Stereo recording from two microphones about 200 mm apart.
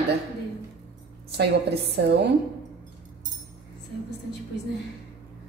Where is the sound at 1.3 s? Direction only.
55° right (ahead or behind).